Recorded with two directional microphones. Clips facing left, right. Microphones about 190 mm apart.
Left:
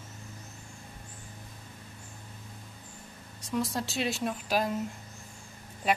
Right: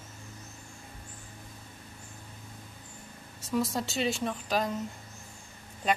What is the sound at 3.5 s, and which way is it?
Speech, centre (ahead or behind).